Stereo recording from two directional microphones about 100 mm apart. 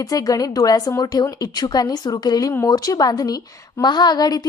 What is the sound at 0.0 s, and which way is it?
A woman's voice, 40° left (ahead or behind).